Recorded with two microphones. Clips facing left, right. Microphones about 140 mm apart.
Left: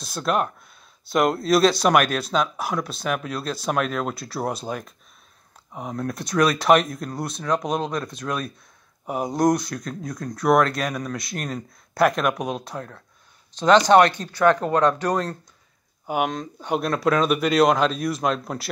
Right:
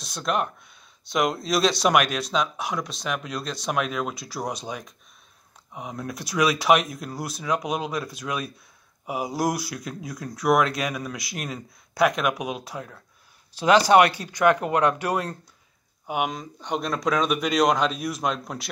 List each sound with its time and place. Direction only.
0.0 s speech: centre (ahead or behind)